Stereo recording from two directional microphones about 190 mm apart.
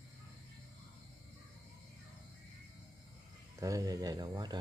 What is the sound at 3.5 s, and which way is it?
Speech, 15° right (ahead or behind).